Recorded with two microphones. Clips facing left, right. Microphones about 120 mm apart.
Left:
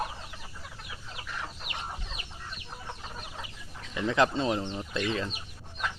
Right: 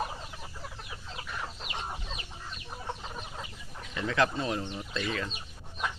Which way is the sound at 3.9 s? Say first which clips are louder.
Left 3 dB; 15° left (ahead or behind).